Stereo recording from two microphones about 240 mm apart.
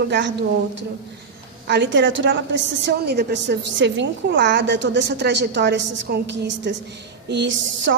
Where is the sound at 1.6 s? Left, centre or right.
Right.